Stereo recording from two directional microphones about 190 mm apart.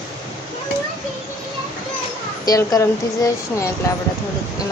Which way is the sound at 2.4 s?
20° left (ahead or behind).